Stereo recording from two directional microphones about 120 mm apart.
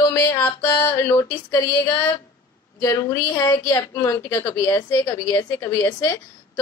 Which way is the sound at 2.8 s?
25° left (ahead or behind).